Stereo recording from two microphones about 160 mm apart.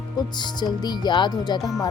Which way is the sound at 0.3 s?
25° left (ahead or behind).